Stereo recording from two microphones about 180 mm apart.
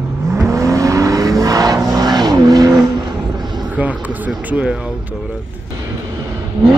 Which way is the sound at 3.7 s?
10° right (ahead or behind).